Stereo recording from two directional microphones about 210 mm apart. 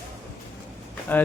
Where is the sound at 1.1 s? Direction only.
10° left (ahead or behind).